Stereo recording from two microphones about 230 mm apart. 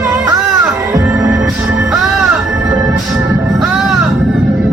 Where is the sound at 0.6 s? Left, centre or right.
Centre.